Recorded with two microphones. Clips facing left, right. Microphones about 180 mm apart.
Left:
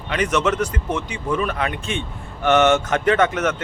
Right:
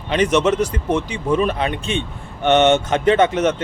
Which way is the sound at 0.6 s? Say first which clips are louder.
Right 4 dB; 35° right (ahead or behind).